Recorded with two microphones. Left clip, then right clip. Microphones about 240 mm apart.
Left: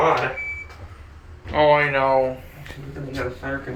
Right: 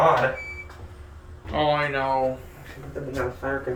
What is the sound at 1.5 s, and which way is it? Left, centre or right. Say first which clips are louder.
Speech: left 6 dB; centre.